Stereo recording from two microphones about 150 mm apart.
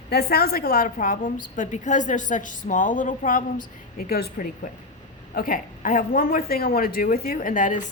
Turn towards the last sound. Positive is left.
turn(degrees=60)  # may be behind; listen again after turning